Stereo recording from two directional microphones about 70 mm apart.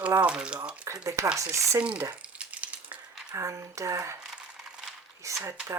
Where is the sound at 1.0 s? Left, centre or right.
Right.